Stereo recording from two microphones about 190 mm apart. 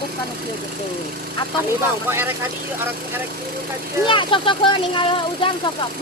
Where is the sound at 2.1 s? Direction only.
10° right (ahead or behind).